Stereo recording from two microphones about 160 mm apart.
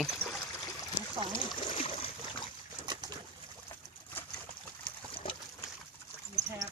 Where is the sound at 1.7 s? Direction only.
35° left (ahead or behind).